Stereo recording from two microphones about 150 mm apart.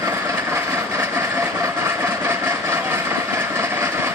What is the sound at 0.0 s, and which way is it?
Vehicle, 20° right (ahead or behind).